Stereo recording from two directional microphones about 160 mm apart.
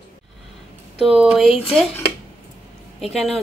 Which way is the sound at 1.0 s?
5° right (ahead or behind).